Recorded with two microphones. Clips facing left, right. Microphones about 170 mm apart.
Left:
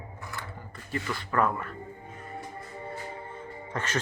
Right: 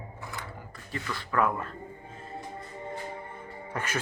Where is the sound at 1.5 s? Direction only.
25° right (ahead or behind).